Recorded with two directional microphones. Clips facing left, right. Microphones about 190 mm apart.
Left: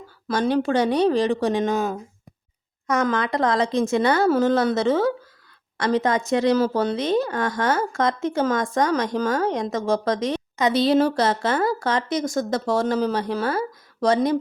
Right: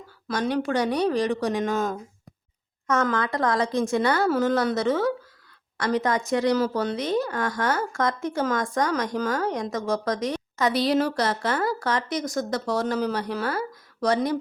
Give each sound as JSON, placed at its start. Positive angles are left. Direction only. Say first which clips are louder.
{"t": 0.3, "sound": "speech", "louder": "left 4 dB", "side_deg": 30}
{"t": 1.7, "sound": "speech", "louder": "left 2 dB", "side_deg": 10}